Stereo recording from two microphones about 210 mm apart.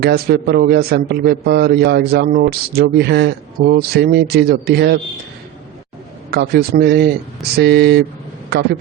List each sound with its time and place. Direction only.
0.0 s a man's voice: 45° right (ahead or behind)
6.3 s a man's voice: 45° right (ahead or behind)